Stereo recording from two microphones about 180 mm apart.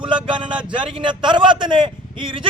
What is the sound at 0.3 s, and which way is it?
A man's voice, 25° right (ahead or behind).